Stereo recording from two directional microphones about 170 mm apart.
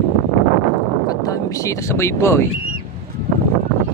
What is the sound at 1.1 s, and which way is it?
Speech, 20° left (ahead or behind).